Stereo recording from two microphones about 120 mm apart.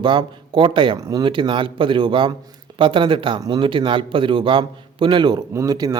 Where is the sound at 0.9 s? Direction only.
30° right (ahead or behind).